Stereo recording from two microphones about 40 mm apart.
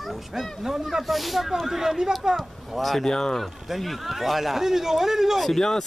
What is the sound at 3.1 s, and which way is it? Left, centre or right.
Speech, centre.